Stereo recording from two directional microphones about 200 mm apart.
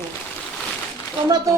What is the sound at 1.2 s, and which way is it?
Speech, 20° right (ahead or behind).